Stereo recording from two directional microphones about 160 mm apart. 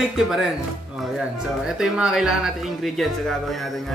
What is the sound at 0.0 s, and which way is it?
Speech, centre (ahead or behind).